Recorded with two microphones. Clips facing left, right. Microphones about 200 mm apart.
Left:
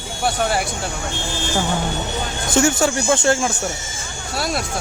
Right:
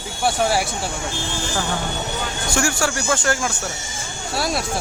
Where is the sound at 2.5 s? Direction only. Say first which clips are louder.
Left 6 dB; 20° left (ahead or behind).